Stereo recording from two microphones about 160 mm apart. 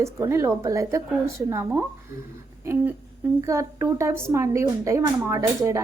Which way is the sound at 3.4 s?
20° right (ahead or behind).